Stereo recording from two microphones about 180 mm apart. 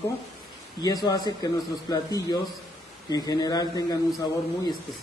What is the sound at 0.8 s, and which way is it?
Speech, 20° left (ahead or behind).